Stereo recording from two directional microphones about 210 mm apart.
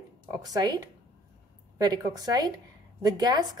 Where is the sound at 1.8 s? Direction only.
20° right (ahead or behind).